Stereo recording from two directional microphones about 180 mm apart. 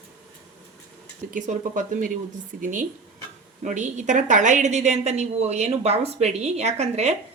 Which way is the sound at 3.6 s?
40° right (ahead or behind).